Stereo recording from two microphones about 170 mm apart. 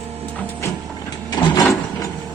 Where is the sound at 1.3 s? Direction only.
25° left (ahead or behind).